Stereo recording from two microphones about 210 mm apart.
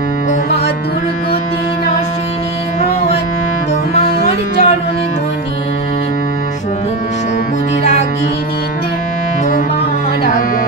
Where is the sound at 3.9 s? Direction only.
35° left (ahead or behind).